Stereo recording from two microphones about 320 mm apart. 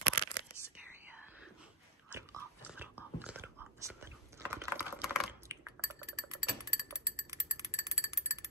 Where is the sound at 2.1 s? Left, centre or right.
Centre.